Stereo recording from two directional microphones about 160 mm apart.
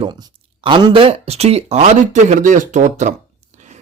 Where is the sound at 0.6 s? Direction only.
30° right (ahead or behind).